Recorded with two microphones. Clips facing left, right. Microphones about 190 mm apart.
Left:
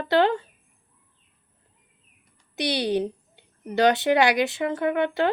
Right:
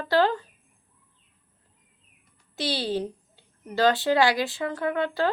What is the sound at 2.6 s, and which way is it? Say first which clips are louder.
Speech: left 3 dB; 20° left (ahead or behind).